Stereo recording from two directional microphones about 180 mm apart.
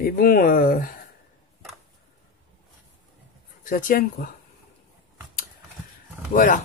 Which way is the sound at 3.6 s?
50° left (ahead or behind).